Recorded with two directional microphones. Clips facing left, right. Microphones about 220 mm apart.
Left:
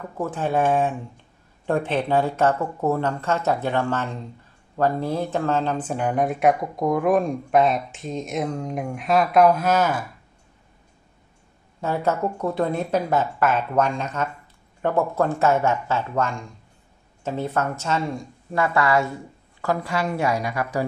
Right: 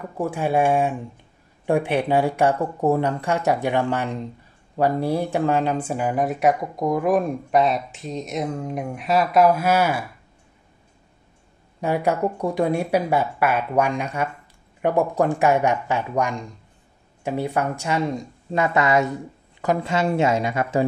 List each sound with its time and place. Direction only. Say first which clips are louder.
0.2 s speech: right 2 dB; 10° right (ahead or behind)
11.8 s speech: right 2 dB; 15° right (ahead or behind)